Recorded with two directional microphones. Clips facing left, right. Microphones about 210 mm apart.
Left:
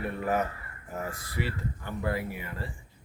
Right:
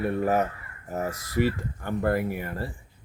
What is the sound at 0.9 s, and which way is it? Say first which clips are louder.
Speech: right 7 dB; 40° right (ahead or behind).